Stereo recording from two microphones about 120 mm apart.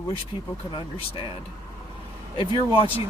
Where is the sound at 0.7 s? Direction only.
45° left (ahead or behind).